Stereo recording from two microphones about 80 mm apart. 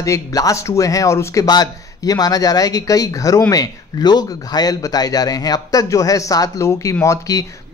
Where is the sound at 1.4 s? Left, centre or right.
Left.